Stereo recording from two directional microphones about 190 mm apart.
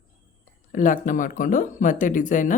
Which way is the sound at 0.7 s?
45° left (ahead or behind).